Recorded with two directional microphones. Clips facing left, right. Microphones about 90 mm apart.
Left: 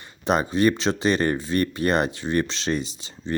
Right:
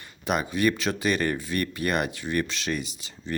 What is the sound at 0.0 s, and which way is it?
Speech, 30° left (ahead or behind).